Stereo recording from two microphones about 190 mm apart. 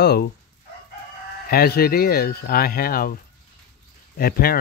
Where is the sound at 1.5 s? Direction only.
55° left (ahead or behind).